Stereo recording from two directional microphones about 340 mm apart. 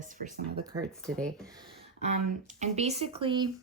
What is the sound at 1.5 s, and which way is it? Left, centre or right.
Speech, centre.